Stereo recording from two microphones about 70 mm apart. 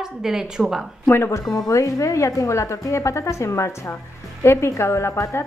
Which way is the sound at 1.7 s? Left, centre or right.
Left.